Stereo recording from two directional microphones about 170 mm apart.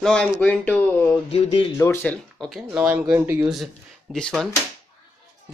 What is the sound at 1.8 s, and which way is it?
Speech, 15° left (ahead or behind).